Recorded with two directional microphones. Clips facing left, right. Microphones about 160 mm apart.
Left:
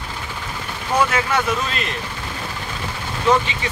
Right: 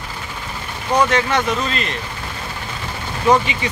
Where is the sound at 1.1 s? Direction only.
5° left (ahead or behind).